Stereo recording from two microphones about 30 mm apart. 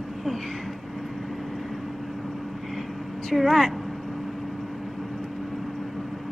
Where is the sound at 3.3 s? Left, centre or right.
Centre.